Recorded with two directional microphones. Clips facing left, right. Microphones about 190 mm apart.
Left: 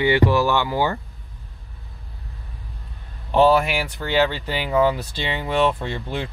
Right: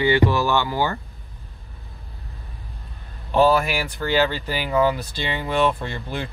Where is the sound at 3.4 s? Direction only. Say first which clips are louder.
Left 1 dB; 25° left (ahead or behind).